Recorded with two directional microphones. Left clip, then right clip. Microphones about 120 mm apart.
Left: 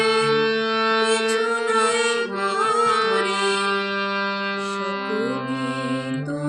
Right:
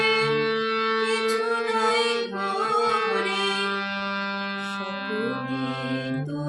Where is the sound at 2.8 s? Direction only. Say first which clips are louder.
Left 4 dB; 55° left (ahead or behind).